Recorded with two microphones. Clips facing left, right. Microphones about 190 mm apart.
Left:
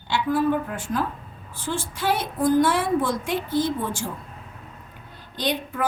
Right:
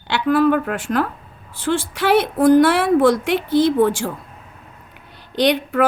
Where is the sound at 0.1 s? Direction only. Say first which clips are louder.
Right 6 dB; 75° right (ahead or behind).